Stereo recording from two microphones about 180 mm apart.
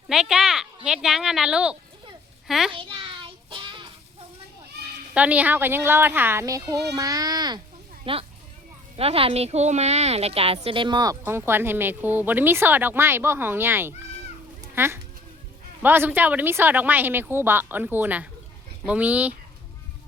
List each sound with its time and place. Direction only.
0.1 s a sound: 5° right (ahead or behind)
2.5 s a child's voice: centre (ahead or behind)
2.7 s child singing: 30° right (ahead or behind)
5.1 s a woman's voice: 10° right (ahead or behind)